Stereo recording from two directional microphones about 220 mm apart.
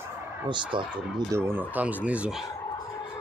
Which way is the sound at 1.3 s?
10° right (ahead or behind).